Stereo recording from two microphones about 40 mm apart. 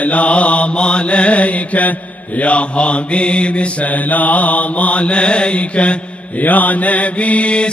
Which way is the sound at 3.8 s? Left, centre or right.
Left.